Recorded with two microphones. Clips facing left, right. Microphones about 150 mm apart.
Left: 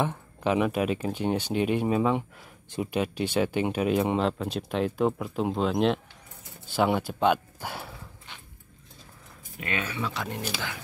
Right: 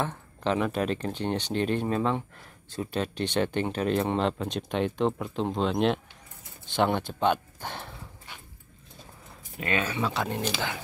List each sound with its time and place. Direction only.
0.0 s speech: 10° left (ahead or behind)
9.6 s speech: 35° right (ahead or behind)